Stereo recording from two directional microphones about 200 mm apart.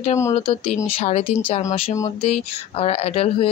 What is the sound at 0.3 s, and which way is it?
Speech, 30° left (ahead or behind).